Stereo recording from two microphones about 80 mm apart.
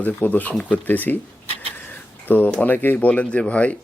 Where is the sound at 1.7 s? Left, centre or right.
Left.